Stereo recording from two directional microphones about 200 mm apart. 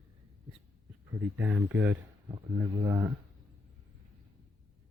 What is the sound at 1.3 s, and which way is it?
Speech, 10° right (ahead or behind).